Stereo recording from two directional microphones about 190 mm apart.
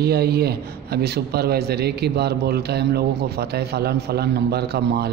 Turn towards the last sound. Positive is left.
turn(degrees=-60)  # may be behind; listen again after turning